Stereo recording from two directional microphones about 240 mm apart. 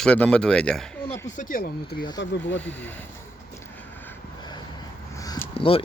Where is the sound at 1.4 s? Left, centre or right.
Left.